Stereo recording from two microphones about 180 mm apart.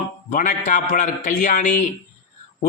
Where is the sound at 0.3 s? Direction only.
45° left (ahead or behind).